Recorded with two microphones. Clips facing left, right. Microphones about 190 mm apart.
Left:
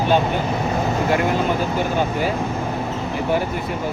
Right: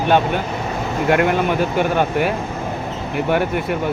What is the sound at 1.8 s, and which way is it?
Speech, 60° right (ahead or behind).